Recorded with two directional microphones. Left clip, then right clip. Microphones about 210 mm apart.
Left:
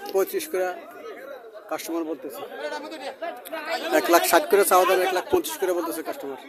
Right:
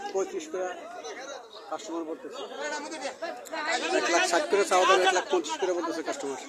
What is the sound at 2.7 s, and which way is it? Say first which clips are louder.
Speech: left 2 dB; 45° left (ahead or behind).